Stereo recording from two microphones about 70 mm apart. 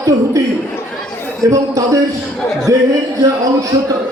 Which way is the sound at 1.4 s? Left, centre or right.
Right.